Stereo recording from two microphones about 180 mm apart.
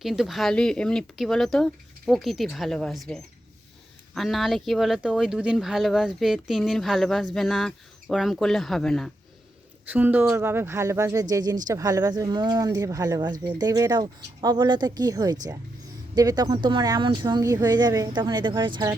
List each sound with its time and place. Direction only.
0.0 s speech: centre (ahead or behind)
9.9 s speech: 10° right (ahead or behind)